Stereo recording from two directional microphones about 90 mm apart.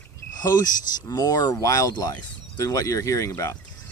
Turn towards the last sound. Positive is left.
turn(degrees=35)  # may be behind; listen again after turning